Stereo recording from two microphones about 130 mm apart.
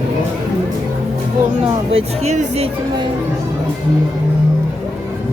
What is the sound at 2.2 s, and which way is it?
Speech, 60° right (ahead or behind).